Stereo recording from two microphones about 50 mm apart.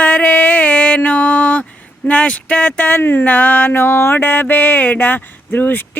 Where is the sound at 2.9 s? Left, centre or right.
Left.